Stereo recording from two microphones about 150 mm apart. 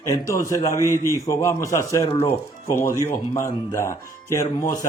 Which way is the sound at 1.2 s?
20° left (ahead or behind).